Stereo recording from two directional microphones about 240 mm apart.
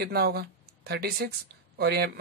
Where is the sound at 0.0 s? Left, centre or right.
Right.